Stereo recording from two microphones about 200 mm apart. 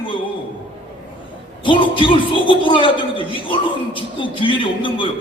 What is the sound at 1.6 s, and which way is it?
A man's voice, 25° left (ahead or behind).